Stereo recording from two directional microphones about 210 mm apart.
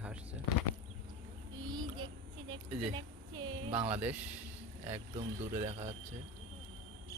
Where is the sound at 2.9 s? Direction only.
20° right (ahead or behind).